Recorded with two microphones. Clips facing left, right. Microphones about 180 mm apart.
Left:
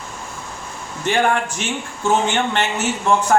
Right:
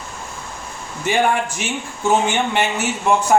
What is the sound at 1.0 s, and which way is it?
Speech, 10° right (ahead or behind).